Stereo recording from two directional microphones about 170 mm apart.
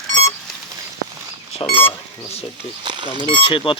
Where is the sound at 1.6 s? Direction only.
30° left (ahead or behind).